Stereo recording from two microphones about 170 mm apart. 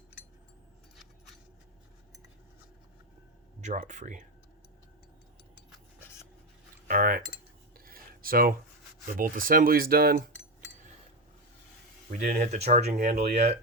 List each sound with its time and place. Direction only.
3.6 s speech: 45° right (ahead or behind)
6.0 s a sound: 15° left (ahead or behind)
6.8 s cutlery: 55° right (ahead or behind)
7.9 s a sound: 60° right (ahead or behind)
9.1 s speech: 55° right (ahead or behind)
12.1 s speech: 50° right (ahead or behind)